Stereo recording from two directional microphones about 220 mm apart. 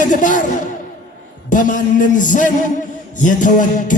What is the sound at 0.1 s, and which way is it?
Music, 35° left (ahead or behind).